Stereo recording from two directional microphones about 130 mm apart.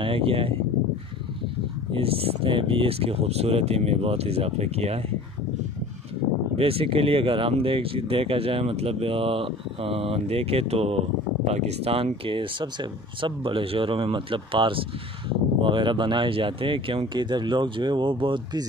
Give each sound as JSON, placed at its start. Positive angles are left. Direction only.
{"t": 0.0, "sound": "speech", "side_deg": -45}
{"t": 1.9, "sound": "speech", "side_deg": -45}
{"t": 6.5, "sound": "speech", "side_deg": -45}